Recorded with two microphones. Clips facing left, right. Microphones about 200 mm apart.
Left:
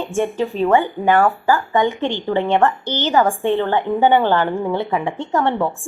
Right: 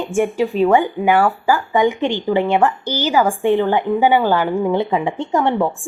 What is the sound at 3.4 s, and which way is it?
A woman's voice, 15° right (ahead or behind).